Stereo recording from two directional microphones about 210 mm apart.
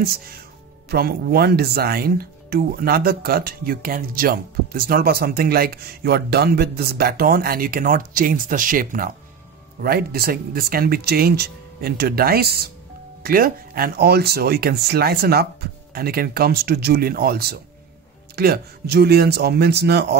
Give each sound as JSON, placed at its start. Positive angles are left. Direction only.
{"t": 0.0, "sound": "speech", "side_deg": -45}